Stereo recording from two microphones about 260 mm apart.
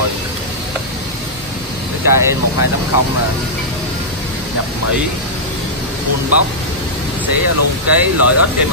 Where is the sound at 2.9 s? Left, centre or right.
Left.